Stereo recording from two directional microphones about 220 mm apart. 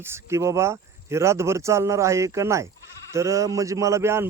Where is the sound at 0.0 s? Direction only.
10° right (ahead or behind).